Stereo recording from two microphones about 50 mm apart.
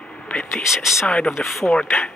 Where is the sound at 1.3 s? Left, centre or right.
Centre.